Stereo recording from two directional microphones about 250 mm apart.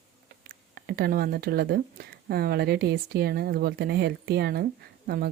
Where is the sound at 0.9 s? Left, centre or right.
Right.